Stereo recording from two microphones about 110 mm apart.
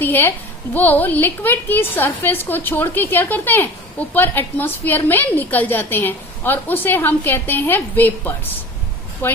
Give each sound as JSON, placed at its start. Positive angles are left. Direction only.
{"t": 0.0, "sound": "a woman's voice", "side_deg": 20}